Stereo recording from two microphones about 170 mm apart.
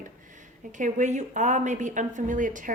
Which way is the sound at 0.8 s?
45° right (ahead or behind).